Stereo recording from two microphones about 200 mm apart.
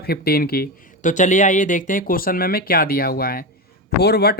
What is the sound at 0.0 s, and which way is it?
Speech, 50° left (ahead or behind).